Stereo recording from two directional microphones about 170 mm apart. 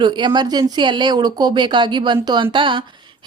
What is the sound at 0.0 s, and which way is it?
A woman's voice, 25° right (ahead or behind).